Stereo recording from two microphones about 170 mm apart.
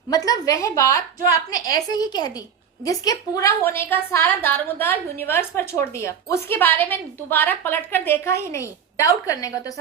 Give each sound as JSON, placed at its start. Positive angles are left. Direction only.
{"t": 0.1, "sound": "a woman's voice", "side_deg": 20}